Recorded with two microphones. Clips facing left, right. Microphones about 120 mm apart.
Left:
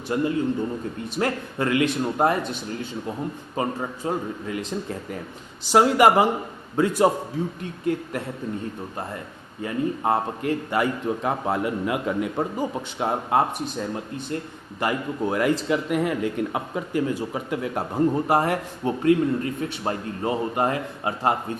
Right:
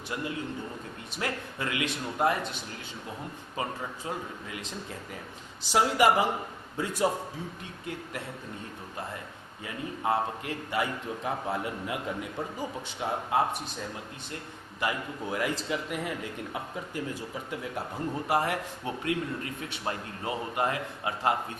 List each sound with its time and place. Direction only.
0.1 s a man's voice: 40° left (ahead or behind)
3.8 s a man's voice: 45° left (ahead or behind)
5.7 s a man's voice: 60° left (ahead or behind)
7.6 s a man's voice: 50° left (ahead or behind)
9.6 s a man's voice: 45° left (ahead or behind); by 17.8 s 70° left (ahead or behind)
17.9 s a man's voice: 45° left (ahead or behind)